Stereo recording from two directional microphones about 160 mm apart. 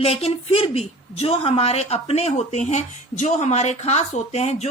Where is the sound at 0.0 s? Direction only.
40° left (ahead or behind).